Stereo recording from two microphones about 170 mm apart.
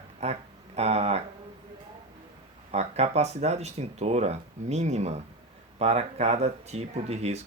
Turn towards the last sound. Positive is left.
turn(degrees=-40)  # may be behind; listen again after turning